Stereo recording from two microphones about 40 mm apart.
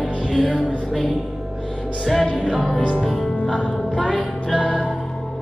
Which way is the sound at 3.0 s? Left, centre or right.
Centre.